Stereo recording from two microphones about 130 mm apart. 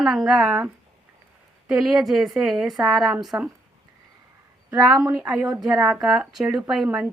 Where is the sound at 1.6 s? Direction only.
5° right (ahead or behind).